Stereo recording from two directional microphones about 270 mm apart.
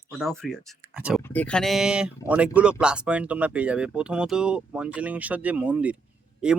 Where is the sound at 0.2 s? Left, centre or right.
Centre.